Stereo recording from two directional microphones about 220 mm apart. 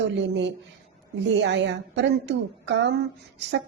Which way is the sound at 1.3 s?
55° right (ahead or behind).